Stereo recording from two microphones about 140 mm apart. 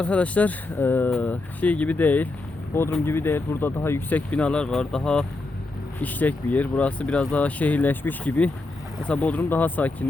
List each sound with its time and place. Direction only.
0.0 s speech: 10° left (ahead or behind)